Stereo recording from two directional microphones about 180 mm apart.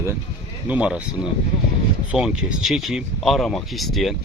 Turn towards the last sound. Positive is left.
turn(degrees=0)  # may be behind; listen again after turning